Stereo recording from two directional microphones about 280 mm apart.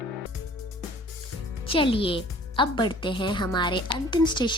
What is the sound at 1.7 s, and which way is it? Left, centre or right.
Speech, centre.